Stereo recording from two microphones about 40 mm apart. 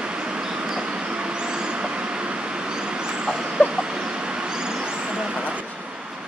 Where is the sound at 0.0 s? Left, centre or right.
Right.